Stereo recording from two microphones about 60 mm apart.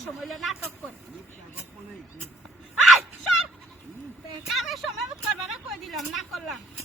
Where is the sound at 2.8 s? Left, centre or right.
Centre.